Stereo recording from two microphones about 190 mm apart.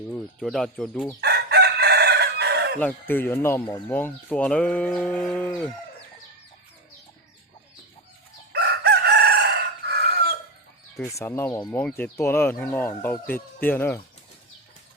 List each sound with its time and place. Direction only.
0.1 s speech: centre (ahead or behind)
1.2 s chicken: 60° right (ahead or behind)
2.7 s speech: 10° left (ahead or behind)
8.5 s chicken: 55° right (ahead or behind)
11.0 s speech: 15° left (ahead or behind)